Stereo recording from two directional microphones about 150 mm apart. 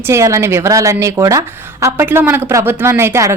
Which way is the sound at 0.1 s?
20° right (ahead or behind).